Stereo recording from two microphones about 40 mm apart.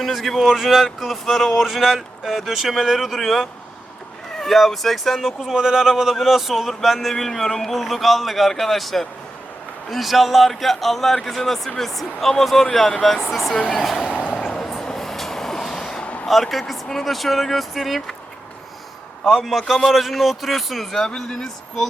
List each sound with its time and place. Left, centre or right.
0.0 s speech: centre
5.5 s speech: centre
13.5 s speech: left
13.8 s speech: centre
14.2 s a sound: left
14.8 s train: centre
16.2 s speech: centre
19.3 s speech: centre
21.0 s speech: centre